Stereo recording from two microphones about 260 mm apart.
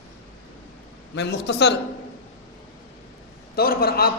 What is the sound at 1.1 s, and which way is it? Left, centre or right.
Speech, left.